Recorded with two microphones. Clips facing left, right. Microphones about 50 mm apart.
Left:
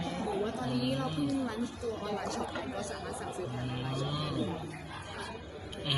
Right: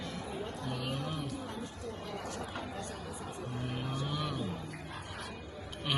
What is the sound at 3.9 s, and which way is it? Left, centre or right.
Vehicle, centre.